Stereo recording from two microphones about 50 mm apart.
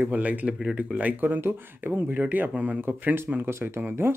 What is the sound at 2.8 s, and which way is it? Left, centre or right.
Speech, right.